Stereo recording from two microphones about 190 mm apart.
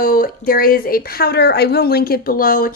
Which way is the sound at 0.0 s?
50° left (ahead or behind).